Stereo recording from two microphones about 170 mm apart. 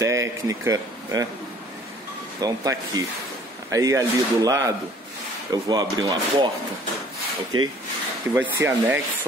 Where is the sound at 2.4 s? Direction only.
20° right (ahead or behind).